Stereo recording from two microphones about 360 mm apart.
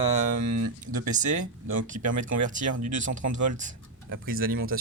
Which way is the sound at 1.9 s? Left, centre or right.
Right.